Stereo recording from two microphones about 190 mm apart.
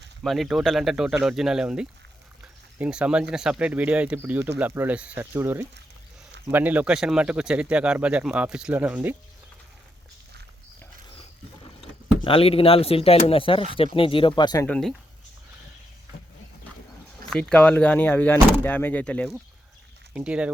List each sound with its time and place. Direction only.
0.2 s speech: centre (ahead or behind)
12.2 s speech: 30° left (ahead or behind)
14.7 s speech: centre (ahead or behind)
17.2 s speech: 5° left (ahead or behind)
20.1 s speech: 5° right (ahead or behind)